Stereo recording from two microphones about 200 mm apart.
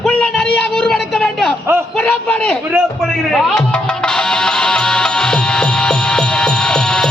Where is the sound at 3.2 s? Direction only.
5° left (ahead or behind).